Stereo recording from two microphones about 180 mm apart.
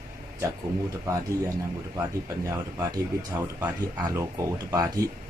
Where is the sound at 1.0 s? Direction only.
15° right (ahead or behind).